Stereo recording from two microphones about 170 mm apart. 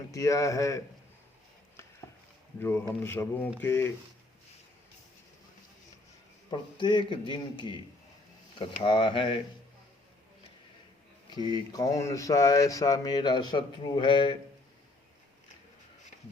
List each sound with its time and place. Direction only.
0.1 s speech: 20° left (ahead or behind)
2.6 s speech: 15° left (ahead or behind)
6.5 s speech: 25° left (ahead or behind)
11.3 s speech: 25° left (ahead or behind)